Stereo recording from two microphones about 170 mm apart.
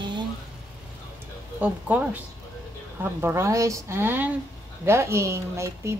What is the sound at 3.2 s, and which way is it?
A woman's voice, 15° right (ahead or behind).